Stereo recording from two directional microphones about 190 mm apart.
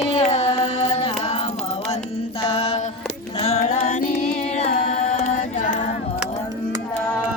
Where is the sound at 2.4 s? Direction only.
30° left (ahead or behind).